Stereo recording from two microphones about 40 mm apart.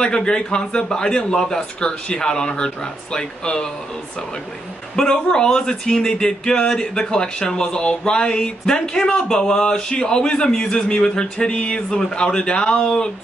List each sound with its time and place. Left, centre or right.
0.0 s speech: left
5.0 s speech: left